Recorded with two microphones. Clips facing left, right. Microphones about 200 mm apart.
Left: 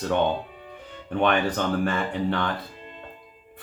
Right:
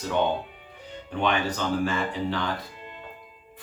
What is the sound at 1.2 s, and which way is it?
Speech, 55° left (ahead or behind).